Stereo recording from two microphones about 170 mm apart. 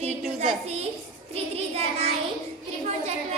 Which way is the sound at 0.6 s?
40° right (ahead or behind).